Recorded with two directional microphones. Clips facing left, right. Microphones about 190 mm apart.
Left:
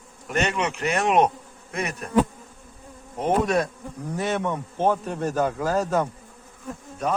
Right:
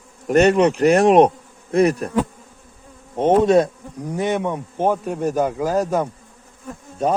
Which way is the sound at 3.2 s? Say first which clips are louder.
Right 8 dB; 25° right (ahead or behind).